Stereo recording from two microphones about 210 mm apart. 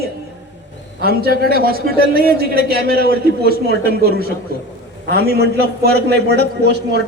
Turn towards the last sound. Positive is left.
turn(degrees=-50)  # may be behind; listen again after turning